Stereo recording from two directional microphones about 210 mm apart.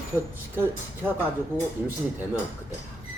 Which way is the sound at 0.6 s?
10° right (ahead or behind).